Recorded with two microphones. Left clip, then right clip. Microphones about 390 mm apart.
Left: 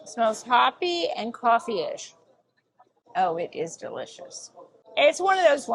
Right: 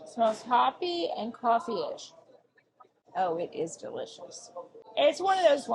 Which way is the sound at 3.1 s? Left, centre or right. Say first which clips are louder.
Left 5 dB; left.